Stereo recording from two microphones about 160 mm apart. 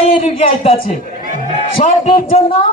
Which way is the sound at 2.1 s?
35° left (ahead or behind).